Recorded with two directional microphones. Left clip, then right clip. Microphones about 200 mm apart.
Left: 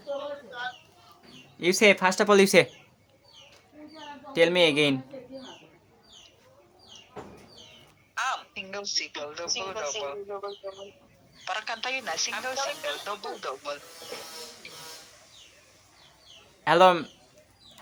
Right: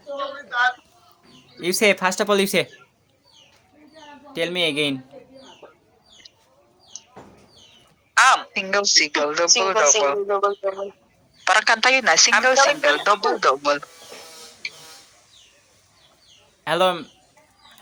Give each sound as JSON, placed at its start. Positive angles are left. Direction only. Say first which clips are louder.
{"t": 0.2, "sound": "a sound", "louder": "right 13 dB", "side_deg": -45}
{"t": 1.6, "sound": "a woman's voice", "louder": "right 2 dB", "side_deg": -10}
{"t": 2.3, "sound": "a man's voice", "louder": "left 3 dB", "side_deg": 5}
{"t": 4.3, "sound": "a man's voice", "louder": "left 2 dB", "side_deg": 10}
{"t": 8.1, "sound": "a woman's voice", "louder": "right 15 dB", "side_deg": -50}
{"t": 16.6, "sound": "a man's voice", "louder": "left 1 dB", "side_deg": 5}